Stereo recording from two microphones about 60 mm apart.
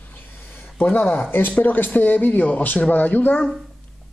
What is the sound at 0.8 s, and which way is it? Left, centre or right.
Speech, left.